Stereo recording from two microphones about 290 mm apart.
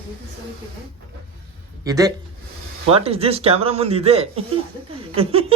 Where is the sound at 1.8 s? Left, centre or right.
Centre.